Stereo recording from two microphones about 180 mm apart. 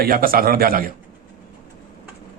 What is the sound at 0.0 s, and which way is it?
Speech, 55° right (ahead or behind).